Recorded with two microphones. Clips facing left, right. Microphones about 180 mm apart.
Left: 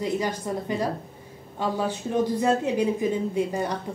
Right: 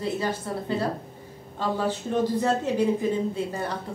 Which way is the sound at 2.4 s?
15° left (ahead or behind).